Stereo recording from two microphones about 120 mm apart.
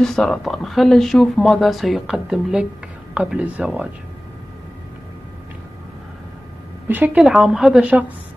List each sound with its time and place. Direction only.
0.0 s speech: 5° left (ahead or behind)
6.9 s speech: 10° right (ahead or behind)